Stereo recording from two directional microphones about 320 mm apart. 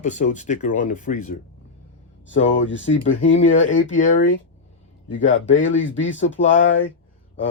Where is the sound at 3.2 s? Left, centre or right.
Left.